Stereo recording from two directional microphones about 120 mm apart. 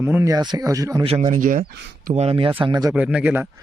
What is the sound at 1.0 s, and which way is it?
Speech, 55° right (ahead or behind).